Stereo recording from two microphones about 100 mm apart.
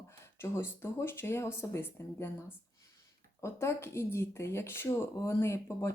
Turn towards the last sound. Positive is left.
turn(degrees=30)  # may be behind; listen again after turning